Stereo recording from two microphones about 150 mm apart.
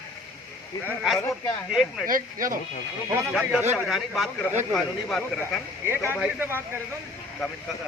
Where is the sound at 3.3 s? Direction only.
Centre (ahead or behind).